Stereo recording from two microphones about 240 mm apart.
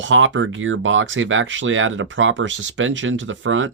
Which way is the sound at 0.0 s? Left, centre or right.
Right.